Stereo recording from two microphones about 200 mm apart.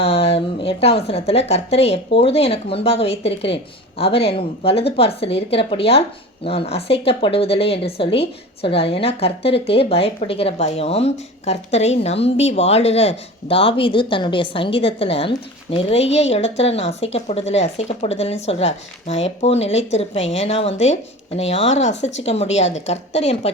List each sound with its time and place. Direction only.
0.0 s a woman's voice: 30° left (ahead or behind)